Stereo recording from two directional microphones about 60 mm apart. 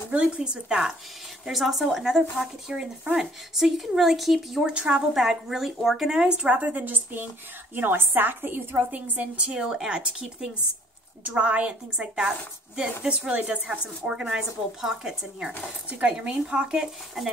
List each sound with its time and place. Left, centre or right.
0.1 s a woman's voice: centre
4.7 s speech: centre
5.1 s a woman's voice: centre; by 9.5 s right
9.5 s speech: centre